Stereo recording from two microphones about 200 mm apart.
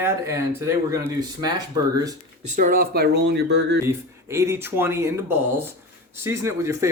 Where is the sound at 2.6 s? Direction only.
45° right (ahead or behind).